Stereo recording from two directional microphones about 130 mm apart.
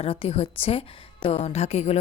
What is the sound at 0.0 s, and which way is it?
A woman's voice, 50° left (ahead or behind).